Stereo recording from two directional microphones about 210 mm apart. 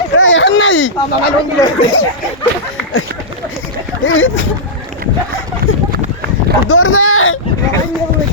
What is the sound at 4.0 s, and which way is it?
Speech, 70° left (ahead or behind).